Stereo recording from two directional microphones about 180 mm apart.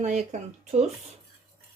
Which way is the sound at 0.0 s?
40° right (ahead or behind).